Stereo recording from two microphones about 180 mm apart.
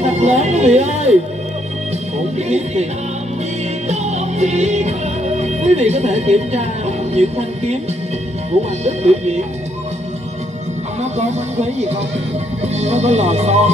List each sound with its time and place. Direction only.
0.0 s music: 35° right (ahead or behind)
2.3 s speech: 35° right (ahead or behind)
3.9 s music: 40° right (ahead or behind)
7.2 s speech: 35° right (ahead or behind)
8.8 s speech: 35° right (ahead or behind)
11.0 s speech: 40° right (ahead or behind)